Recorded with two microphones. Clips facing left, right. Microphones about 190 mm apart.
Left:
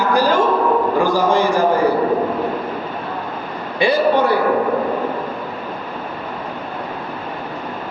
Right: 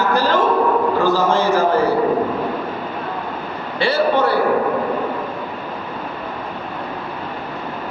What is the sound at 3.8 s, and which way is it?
Speech, 15° left (ahead or behind).